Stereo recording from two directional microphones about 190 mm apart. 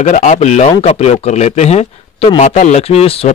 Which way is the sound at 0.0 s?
40° left (ahead or behind).